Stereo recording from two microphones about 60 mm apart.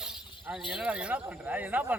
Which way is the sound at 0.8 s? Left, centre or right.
Right.